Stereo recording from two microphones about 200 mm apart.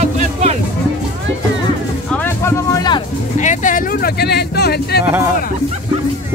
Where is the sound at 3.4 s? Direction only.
40° left (ahead or behind).